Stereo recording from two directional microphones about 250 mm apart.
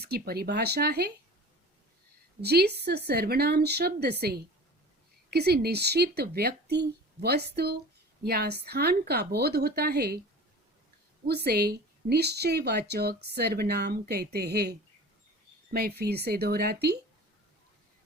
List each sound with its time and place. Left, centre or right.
0.0 s speech: right
2.4 s speech: right
11.3 s speech: right
15.7 s speech: right